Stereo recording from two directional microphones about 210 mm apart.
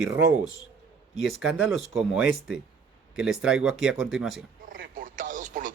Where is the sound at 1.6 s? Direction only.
Centre (ahead or behind).